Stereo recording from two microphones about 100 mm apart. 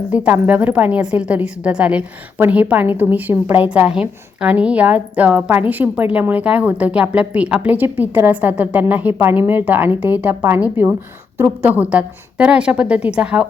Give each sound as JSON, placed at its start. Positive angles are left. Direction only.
{"t": 0.1, "sound": "a woman's voice", "side_deg": -15}